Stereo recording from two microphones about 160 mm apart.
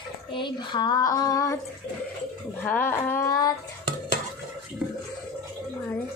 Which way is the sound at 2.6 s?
10° left (ahead or behind).